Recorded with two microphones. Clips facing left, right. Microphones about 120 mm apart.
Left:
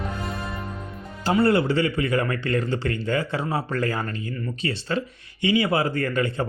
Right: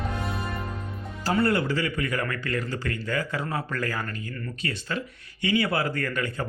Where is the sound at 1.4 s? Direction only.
25° left (ahead or behind).